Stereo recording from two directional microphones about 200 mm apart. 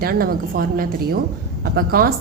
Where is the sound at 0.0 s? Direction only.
50° right (ahead or behind).